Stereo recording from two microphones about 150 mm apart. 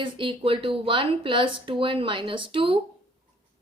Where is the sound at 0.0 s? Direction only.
35° right (ahead or behind).